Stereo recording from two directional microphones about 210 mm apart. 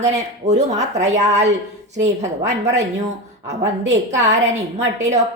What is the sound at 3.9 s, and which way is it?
Speech, 35° right (ahead or behind).